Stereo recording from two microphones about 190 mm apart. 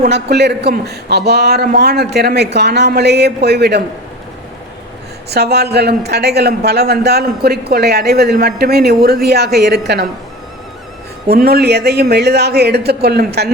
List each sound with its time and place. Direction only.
0.0 s speech: 60° right (ahead or behind)
5.3 s speech: 60° right (ahead or behind)
11.3 s speech: 55° right (ahead or behind)